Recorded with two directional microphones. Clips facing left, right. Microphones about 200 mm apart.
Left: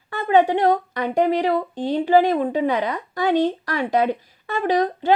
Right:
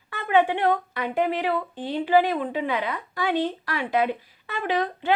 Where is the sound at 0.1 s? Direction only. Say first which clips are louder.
Left 4 dB; 40° left (ahead or behind).